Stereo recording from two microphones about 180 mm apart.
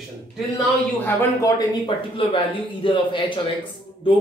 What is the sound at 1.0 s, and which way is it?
Speech, 20° left (ahead or behind).